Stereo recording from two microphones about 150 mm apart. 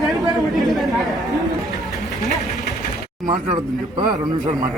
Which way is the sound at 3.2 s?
35° right (ahead or behind).